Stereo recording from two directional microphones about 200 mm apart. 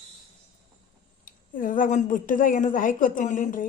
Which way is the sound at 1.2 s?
40° left (ahead or behind).